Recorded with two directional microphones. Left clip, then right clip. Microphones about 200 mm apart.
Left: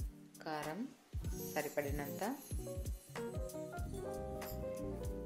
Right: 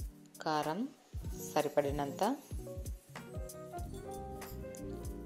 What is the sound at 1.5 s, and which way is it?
Speech, 40° right (ahead or behind).